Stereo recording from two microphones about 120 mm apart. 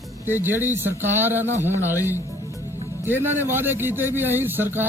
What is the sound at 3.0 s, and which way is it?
A man's voice, 20° right (ahead or behind).